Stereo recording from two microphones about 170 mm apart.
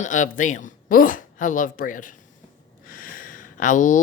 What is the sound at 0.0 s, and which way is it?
Speech, 50° left (ahead or behind).